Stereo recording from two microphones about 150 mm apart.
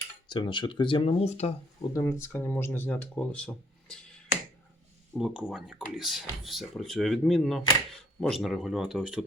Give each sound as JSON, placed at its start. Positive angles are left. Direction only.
{"t": 0.3, "sound": "speech", "side_deg": 30}
{"t": 1.9, "sound": "speech", "side_deg": 15}
{"t": 5.1, "sound": "speech", "side_deg": -5}